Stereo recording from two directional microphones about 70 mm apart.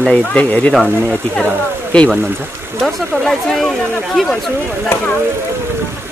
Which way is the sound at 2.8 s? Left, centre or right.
Centre.